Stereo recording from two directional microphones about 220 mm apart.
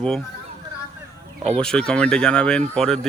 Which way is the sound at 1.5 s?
5° left (ahead or behind).